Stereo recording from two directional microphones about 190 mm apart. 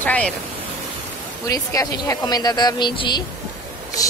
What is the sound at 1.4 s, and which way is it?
Speech, 15° left (ahead or behind).